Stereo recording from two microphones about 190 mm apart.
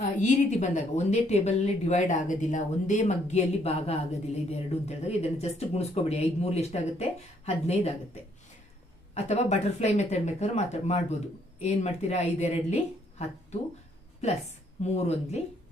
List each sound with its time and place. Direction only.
0.0 s a woman's voice: 40° left (ahead or behind)
9.1 s a woman's voice: 35° left (ahead or behind)